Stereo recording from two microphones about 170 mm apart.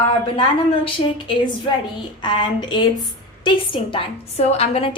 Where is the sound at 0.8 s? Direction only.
30° left (ahead or behind).